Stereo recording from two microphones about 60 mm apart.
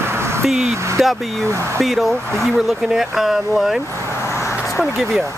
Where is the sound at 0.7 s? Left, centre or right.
Right.